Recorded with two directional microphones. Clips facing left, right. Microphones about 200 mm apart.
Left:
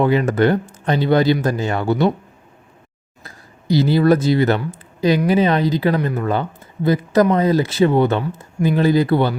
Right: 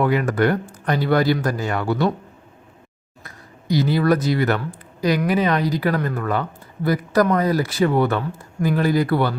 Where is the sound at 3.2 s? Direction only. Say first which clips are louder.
Even; 30° left (ahead or behind).